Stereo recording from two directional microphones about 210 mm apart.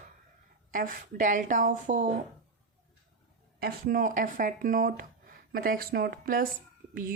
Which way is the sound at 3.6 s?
45° right (ahead or behind).